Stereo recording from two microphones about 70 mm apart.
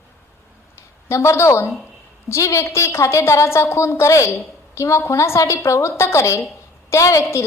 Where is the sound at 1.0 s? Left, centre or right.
Left.